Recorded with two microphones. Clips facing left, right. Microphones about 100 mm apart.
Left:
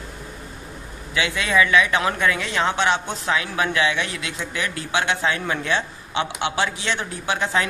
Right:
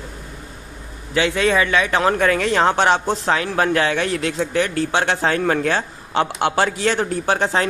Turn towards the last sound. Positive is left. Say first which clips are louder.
# right 4 dB
turn(degrees=-35)  # may be behind; listen again after turning